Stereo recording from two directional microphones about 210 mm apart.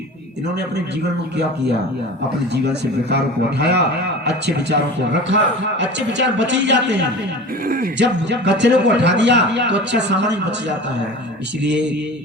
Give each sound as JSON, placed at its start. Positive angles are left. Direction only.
{"t": 3.1, "sound": "a man's voice", "side_deg": -50}
{"t": 7.6, "sound": "a man's voice", "side_deg": -45}